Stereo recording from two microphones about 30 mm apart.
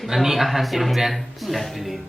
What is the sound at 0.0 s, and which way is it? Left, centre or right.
A man's voice, centre.